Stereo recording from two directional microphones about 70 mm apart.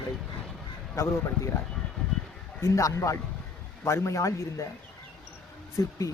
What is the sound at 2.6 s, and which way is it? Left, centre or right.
Speech, left.